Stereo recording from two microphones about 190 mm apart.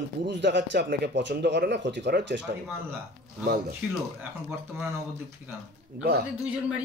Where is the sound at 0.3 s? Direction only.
65° right (ahead or behind).